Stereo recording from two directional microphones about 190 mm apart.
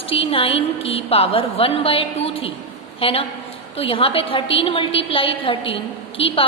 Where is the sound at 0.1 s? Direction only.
30° left (ahead or behind).